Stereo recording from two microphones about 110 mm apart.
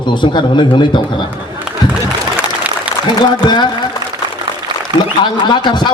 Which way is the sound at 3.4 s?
45° left (ahead or behind).